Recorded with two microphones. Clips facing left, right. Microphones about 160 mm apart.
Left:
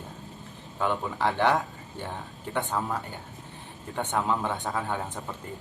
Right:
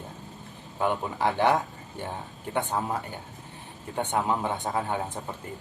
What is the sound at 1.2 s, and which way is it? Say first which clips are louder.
A man's voice: right 1 dB; 15° right (ahead or behind).